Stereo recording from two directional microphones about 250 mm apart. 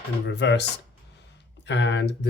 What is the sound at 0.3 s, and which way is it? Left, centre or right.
Speech, left.